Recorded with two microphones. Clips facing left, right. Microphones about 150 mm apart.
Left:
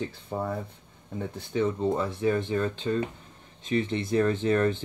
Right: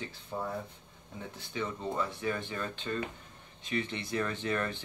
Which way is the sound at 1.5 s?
35° left (ahead or behind).